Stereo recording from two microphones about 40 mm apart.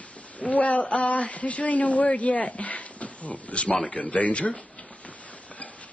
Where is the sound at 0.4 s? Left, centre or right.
Left.